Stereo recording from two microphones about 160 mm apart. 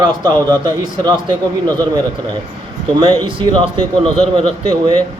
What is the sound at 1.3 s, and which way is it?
Speech, 10° left (ahead or behind).